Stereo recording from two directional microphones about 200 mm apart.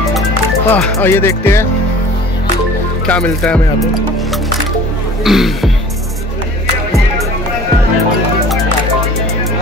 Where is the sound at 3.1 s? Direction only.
5° left (ahead or behind).